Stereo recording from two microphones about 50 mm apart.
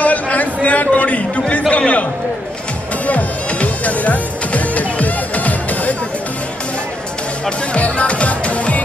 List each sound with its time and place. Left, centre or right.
0.0 s a sound: left
3.1 s music: left
7.4 s music: left